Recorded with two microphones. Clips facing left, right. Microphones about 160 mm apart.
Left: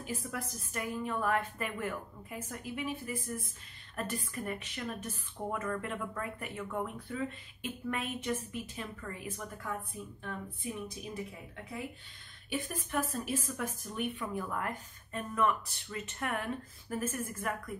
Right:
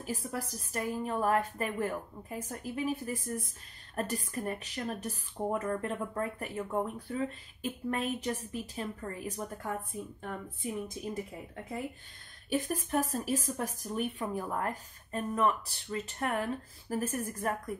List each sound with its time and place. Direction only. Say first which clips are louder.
0.0 s a woman's voice: right 2 dB; 35° right (ahead or behind)
12.4 s a woman's voice: right 5 dB; 40° right (ahead or behind)